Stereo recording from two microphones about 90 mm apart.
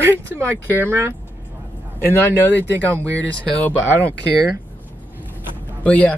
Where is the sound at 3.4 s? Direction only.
15° left (ahead or behind).